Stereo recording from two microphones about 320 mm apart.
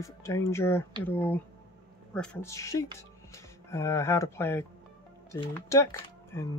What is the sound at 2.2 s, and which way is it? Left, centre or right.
Speech, centre.